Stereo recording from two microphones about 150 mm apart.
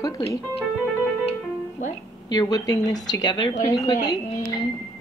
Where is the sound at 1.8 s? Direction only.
55° left (ahead or behind).